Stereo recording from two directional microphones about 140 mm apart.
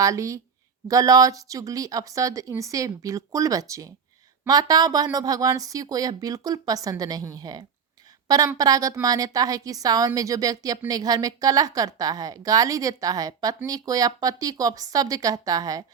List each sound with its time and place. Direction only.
0.0 s a woman's voice: 20° right (ahead or behind)